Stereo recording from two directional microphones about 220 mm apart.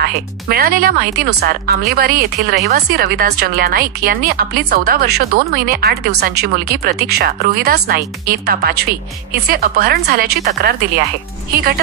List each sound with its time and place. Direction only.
0.0 s speech: 45° right (ahead or behind)